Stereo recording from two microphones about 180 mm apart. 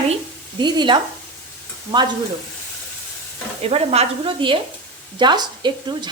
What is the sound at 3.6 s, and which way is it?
Speech, 35° right (ahead or behind).